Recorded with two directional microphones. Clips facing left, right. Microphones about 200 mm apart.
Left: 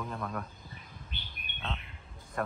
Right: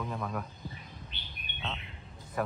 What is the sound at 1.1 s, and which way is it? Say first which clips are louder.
Bird: left 3 dB; 50° left (ahead or behind).